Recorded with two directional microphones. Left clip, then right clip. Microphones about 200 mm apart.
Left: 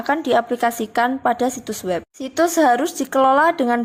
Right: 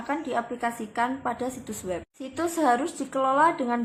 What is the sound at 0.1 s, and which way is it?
A woman's voice, 50° left (ahead or behind).